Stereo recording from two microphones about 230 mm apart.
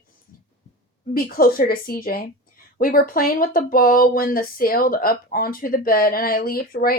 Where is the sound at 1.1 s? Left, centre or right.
Left.